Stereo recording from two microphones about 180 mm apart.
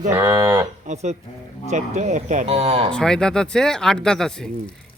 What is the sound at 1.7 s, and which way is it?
Speech, 40° right (ahead or behind).